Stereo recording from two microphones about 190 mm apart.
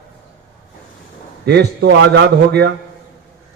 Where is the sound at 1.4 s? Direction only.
60° right (ahead or behind).